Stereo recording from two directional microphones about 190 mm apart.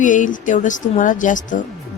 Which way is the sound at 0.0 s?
40° left (ahead or behind).